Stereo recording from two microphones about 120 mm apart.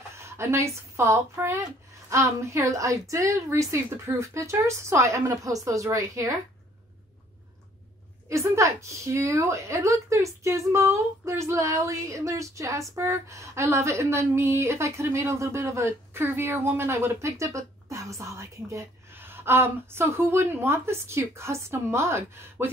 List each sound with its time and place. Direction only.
0.2 s a woman's voice: 20° right (ahead or behind)
8.3 s speech: 25° right (ahead or behind)